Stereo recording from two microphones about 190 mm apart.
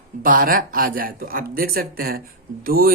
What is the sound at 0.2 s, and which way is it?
Speech, 50° right (ahead or behind).